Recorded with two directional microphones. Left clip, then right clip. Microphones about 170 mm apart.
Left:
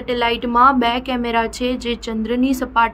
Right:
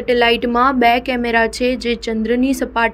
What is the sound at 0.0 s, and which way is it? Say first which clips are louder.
A woman's voice: right 5 dB; 20° right (ahead or behind).